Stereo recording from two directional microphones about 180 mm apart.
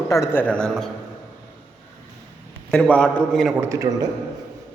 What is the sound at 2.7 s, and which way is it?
Speech, 5° left (ahead or behind).